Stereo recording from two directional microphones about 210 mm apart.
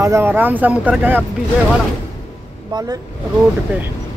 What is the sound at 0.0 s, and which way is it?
Speech, 10° right (ahead or behind).